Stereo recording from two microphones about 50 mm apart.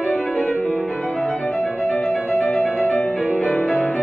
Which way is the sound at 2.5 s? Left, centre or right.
Left.